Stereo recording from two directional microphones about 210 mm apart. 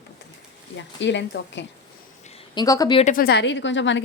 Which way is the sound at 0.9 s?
55° left (ahead or behind).